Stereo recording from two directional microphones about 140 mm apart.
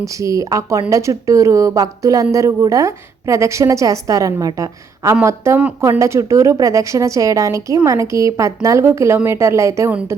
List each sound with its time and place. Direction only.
0.0 s a woman's voice: 25° right (ahead or behind)